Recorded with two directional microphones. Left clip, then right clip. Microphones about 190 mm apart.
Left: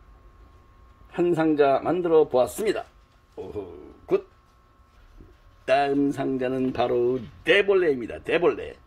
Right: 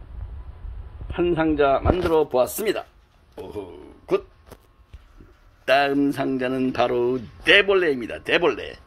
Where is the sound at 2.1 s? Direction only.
5° left (ahead or behind).